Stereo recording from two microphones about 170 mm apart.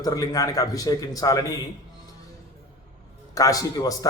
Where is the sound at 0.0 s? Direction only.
20° left (ahead or behind).